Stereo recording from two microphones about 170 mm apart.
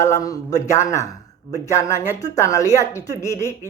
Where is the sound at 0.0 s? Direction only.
20° left (ahead or behind).